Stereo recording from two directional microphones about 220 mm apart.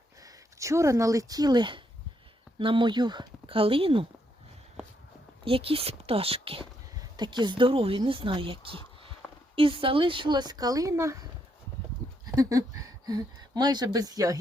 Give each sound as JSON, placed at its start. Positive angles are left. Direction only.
{"t": 0.2, "sound": "speech", "side_deg": -15}
{"t": 5.5, "sound": "speech", "side_deg": -25}
{"t": 12.2, "sound": "speech", "side_deg": -15}